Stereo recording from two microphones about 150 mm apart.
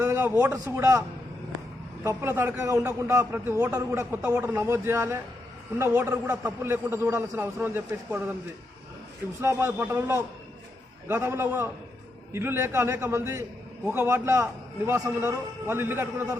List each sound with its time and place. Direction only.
0.0 s a man's voice: 15° right (ahead or behind)
2.0 s a man's voice: 15° right (ahead or behind)
9.4 s a man's voice: 15° right (ahead or behind)